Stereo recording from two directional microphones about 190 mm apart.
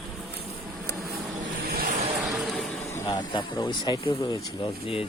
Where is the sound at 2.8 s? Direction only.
15° left (ahead or behind).